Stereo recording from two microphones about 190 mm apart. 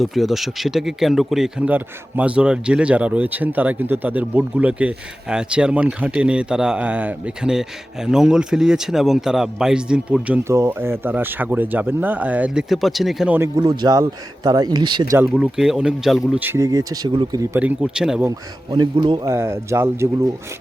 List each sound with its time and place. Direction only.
0.0 s speech: centre (ahead or behind)
13.6 s speech: 20° right (ahead or behind)
15.1 s speech: 5° right (ahead or behind)
18.3 s speech: 20° right (ahead or behind)